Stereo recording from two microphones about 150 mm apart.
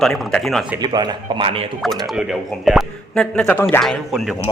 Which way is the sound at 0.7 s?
30° right (ahead or behind).